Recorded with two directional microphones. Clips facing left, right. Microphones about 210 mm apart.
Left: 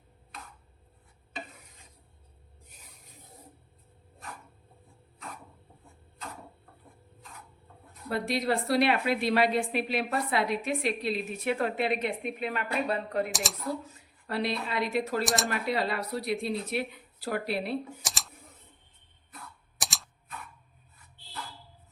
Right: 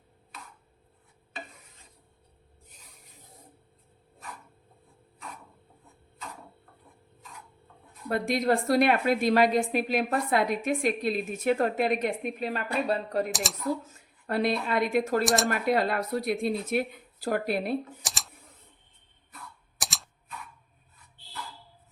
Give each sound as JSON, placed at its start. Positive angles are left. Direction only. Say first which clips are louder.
{"t": 8.1, "sound": "a woman's voice", "louder": "right 3 dB", "side_deg": -50}
{"t": 13.3, "sound": "speech", "louder": "right 1 dB", "side_deg": 0}
{"t": 14.3, "sound": "a woman's voice", "louder": "right 4 dB", "side_deg": -50}
{"t": 15.2, "sound": "speech", "louder": "right 4 dB", "side_deg": 0}
{"t": 15.4, "sound": "a woman's voice", "louder": "right 4 dB", "side_deg": -50}
{"t": 18.0, "sound": "typing", "louder": "even", "side_deg": 0}
{"t": 19.8, "sound": "computer keyboard", "louder": "even", "side_deg": 0}